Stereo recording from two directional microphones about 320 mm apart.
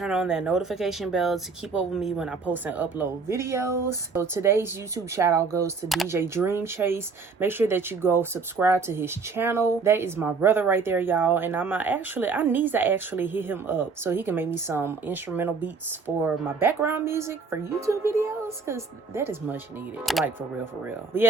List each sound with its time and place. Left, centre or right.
0.0 s speech: centre